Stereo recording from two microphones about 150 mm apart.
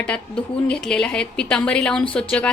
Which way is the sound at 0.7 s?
5° left (ahead or behind).